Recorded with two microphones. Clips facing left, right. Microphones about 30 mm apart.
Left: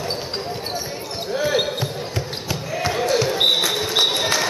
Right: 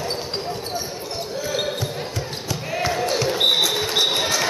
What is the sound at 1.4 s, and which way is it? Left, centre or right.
Basketball bounce, left.